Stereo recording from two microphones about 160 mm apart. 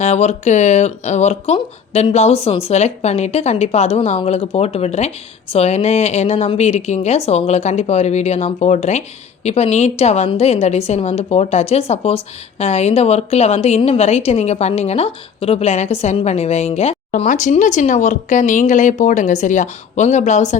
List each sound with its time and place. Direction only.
0.0 s a woman's voice: 45° left (ahead or behind)